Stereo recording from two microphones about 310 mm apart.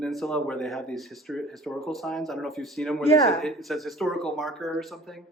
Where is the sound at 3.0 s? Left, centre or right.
Centre.